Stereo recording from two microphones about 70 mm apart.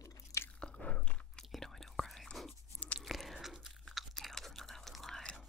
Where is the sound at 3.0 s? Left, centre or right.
Centre.